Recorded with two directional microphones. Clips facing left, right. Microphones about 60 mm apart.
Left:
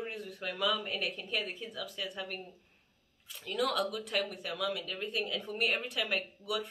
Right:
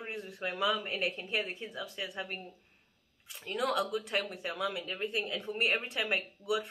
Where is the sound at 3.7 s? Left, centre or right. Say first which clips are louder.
Right 1 dB; centre.